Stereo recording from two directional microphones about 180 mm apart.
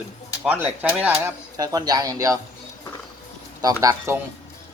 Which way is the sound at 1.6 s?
20° right (ahead or behind).